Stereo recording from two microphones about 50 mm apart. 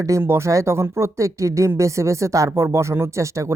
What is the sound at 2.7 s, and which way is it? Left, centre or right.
Speech, right.